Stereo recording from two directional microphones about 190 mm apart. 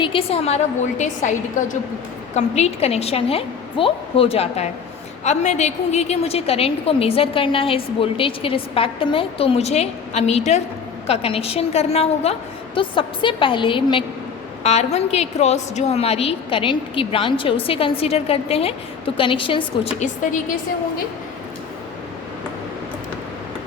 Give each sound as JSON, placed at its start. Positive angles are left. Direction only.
{"t": 0.0, "sound": "a woman's voice", "side_deg": 30}